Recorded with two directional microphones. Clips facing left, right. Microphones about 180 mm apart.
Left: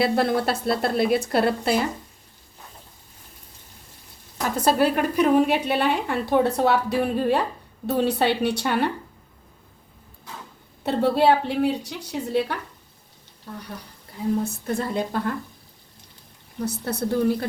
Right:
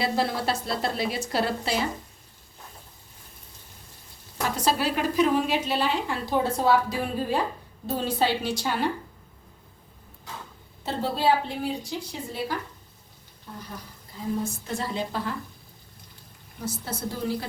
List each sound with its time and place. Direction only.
0.0 s a woman's voice: 55° left (ahead or behind)
4.5 s a woman's voice: 55° left (ahead or behind)
10.8 s a woman's voice: 60° left (ahead or behind)
14.4 s a woman's voice: 55° left (ahead or behind)
16.6 s a woman's voice: 60° left (ahead or behind)